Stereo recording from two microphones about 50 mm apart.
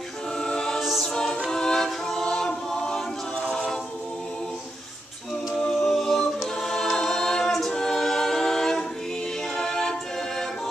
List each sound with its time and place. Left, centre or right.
0.4 s choir: centre
0.7 s choir: centre
1.0 s choir: centre
1.5 s a capella: centre
5.6 s music: centre
6.6 s a capella: centre
9.6 s music: centre